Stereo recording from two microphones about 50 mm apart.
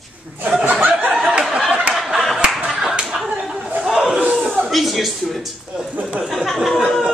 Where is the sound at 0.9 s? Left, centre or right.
Right.